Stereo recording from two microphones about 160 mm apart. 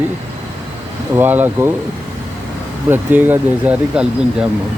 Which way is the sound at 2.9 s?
10° right (ahead or behind).